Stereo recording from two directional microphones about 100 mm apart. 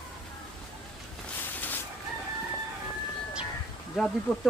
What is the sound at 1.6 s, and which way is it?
Chicken, 20° left (ahead or behind).